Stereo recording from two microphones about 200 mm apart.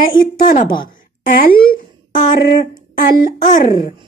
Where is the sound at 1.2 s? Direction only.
45° left (ahead or behind).